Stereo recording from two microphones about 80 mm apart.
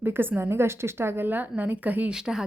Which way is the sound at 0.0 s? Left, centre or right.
Right.